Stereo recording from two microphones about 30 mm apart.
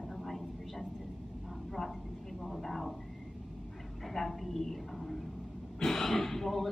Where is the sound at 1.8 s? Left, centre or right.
Centre.